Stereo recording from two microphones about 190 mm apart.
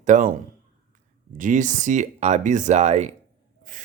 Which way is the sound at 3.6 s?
45° right (ahead or behind).